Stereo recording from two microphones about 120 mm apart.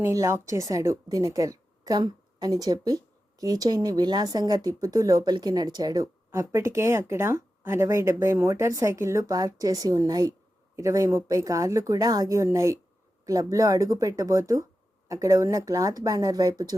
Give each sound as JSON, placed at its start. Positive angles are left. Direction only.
{"t": 0.0, "sound": "a woman's voice", "side_deg": -25}